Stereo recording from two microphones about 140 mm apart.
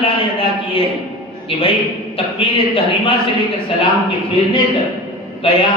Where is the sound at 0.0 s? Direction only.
45° left (ahead or behind).